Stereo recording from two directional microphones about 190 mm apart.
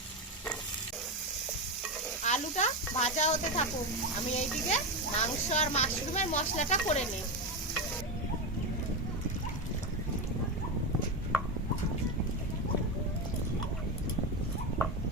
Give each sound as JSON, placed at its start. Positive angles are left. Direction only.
{"t": 2.2, "sound": "speech", "side_deg": 40}